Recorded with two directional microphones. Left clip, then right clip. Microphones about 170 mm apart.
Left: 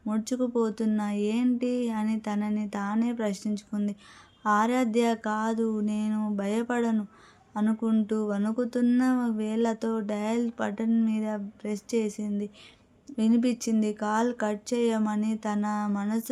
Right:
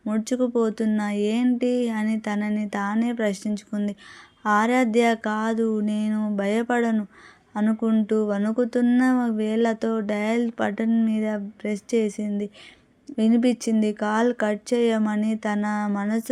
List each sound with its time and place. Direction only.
0.0 s speech: 20° right (ahead or behind)